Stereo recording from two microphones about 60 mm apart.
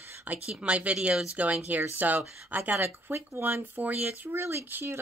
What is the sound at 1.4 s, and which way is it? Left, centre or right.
Speech, right.